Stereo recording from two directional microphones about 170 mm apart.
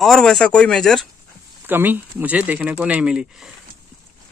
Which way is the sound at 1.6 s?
10° right (ahead or behind).